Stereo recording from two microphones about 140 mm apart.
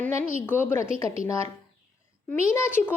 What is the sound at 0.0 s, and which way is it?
A woman's voice, 15° left (ahead or behind).